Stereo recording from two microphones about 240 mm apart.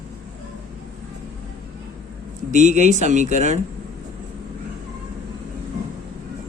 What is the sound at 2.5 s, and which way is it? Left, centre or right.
Speech, right.